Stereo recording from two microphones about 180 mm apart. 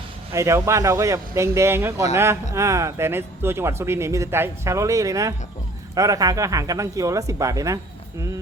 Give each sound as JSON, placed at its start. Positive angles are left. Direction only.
{"t": 0.3, "sound": "speech", "side_deg": -15}